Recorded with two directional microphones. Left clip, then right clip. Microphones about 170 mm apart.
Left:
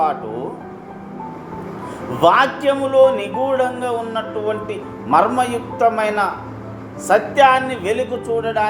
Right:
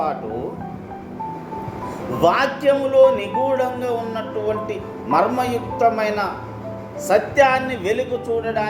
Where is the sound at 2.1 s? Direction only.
10° left (ahead or behind).